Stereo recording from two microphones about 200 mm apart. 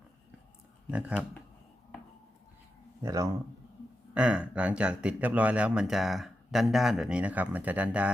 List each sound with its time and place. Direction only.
0.9 s speech: 5° right (ahead or behind)
3.0 s speech: 15° right (ahead or behind)